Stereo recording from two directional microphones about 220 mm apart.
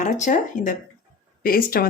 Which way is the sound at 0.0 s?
35° left (ahead or behind).